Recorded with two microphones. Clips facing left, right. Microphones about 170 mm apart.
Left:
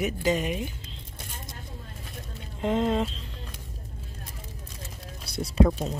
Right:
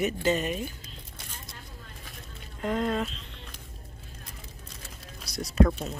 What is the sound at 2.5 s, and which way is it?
Speech, 20° left (ahead or behind).